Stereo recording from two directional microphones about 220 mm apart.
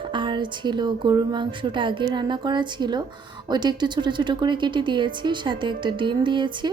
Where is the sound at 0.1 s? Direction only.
20° right (ahead or behind).